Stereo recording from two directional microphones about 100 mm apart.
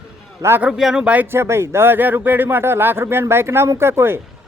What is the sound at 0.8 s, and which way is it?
Speech, 5° right (ahead or behind).